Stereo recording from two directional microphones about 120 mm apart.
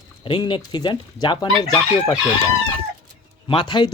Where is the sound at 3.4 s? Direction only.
40° left (ahead or behind).